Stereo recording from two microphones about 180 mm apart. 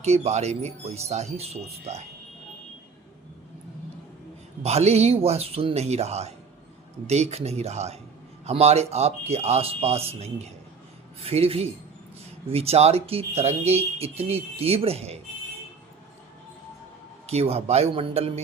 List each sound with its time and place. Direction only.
0.0 s speech: 40° right (ahead or behind)
4.6 s speech: 35° right (ahead or behind)
17.2 s speech: 35° right (ahead or behind)